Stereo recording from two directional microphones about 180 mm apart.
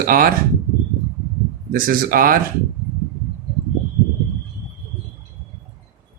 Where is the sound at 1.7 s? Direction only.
50° right (ahead or behind).